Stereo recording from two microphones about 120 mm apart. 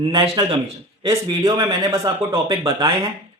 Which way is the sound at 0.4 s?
40° right (ahead or behind).